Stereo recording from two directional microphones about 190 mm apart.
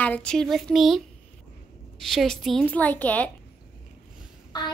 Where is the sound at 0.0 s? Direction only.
5° left (ahead or behind).